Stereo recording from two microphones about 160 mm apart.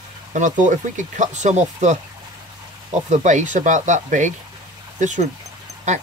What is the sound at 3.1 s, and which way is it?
Speech, 45° right (ahead or behind).